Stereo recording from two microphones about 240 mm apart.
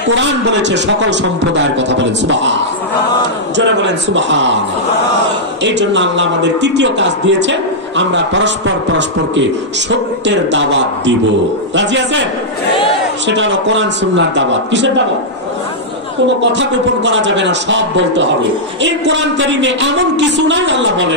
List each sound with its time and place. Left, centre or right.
0.1 s speech: right
5.6 s speech: right
13.3 s speech: right
16.5 s speech: right